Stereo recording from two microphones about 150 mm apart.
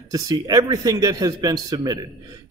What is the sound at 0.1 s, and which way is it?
Speech, 25° right (ahead or behind).